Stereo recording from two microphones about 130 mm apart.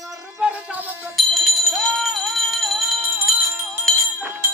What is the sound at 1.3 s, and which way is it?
Music, centre (ahead or behind).